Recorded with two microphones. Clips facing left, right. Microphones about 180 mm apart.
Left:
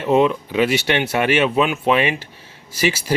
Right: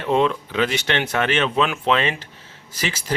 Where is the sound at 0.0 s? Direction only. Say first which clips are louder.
Left 3 dB; 10° left (ahead or behind).